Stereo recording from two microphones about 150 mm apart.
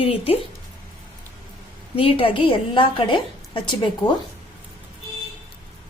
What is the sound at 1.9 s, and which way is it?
A woman's voice, 35° left (ahead or behind).